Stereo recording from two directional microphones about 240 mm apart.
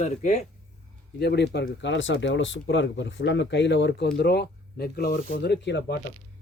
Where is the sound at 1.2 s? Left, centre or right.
Left.